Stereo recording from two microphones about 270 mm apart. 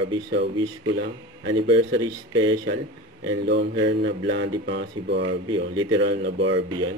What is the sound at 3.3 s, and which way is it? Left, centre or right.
Mantra, right.